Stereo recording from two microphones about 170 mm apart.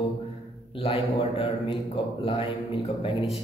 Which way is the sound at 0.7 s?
35° left (ahead or behind).